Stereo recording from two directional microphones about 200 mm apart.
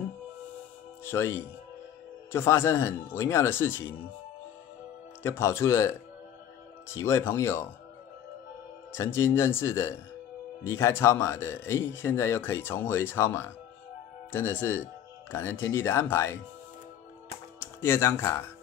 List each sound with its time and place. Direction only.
1.0 s speech: 10° left (ahead or behind)
5.2 s speech: 10° left (ahead or behind)
8.9 s speech: 15° left (ahead or behind)
17.6 s speech: 10° left (ahead or behind)